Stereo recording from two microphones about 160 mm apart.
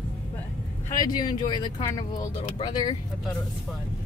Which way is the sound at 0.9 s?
25° left (ahead or behind).